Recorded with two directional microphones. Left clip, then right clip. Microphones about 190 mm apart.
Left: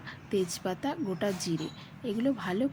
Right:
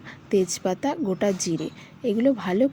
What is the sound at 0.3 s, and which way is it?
Speech, 20° right (ahead or behind).